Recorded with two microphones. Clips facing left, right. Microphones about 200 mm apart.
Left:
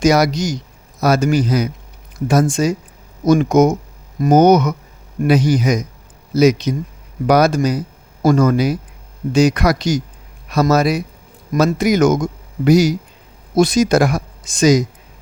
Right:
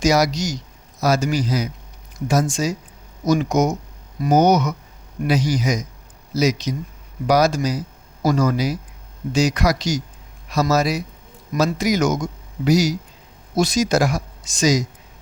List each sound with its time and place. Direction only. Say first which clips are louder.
0.0 s speech: left 4 dB; 55° left (ahead or behind)